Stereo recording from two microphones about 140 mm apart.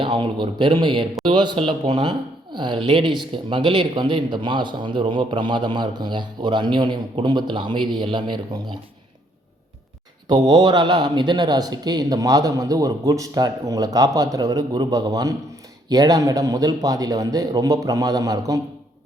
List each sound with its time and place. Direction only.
0.0 s speech: 35° right (ahead or behind)
10.2 s speech: 30° right (ahead or behind)